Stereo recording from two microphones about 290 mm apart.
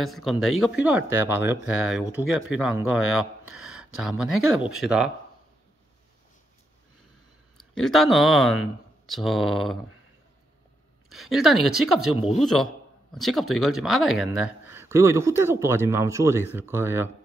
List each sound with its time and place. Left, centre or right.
0.0 s speech: centre
7.7 s speech: centre
11.1 s speech: centre